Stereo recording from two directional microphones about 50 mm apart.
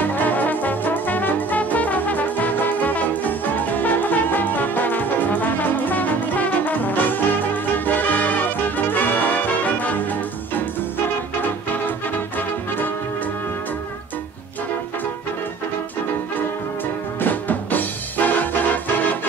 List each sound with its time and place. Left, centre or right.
0.1 s brass instrument: left
7.7 s music: left
12.4 s music: left
17.2 s music: left